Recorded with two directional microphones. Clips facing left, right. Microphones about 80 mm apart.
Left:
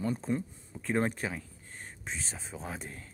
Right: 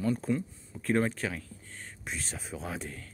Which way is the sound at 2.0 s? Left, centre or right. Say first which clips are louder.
Right 2 dB; centre.